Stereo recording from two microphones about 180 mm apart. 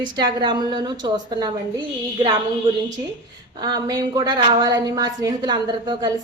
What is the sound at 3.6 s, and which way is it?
A woman's voice, 20° right (ahead or behind).